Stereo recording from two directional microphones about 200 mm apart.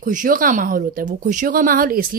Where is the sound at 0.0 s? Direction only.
40° right (ahead or behind).